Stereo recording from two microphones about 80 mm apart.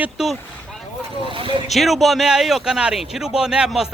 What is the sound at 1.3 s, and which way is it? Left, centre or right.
Speech, right.